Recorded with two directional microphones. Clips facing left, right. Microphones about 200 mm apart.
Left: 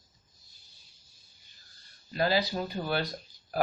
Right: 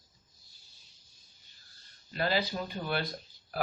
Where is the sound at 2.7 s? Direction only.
40° left (ahead or behind).